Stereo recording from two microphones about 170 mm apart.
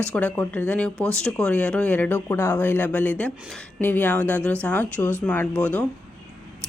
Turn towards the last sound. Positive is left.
turn(degrees=10)  # may be behind; listen again after turning